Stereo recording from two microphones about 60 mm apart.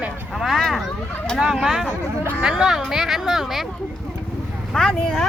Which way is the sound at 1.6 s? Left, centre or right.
Centre.